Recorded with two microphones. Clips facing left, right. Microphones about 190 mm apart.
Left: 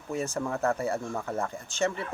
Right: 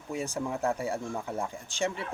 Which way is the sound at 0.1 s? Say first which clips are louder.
Left 2 dB; 15° right (ahead or behind).